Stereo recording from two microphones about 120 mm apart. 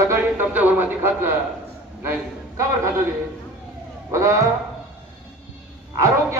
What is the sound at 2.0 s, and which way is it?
Speech, 25° right (ahead or behind).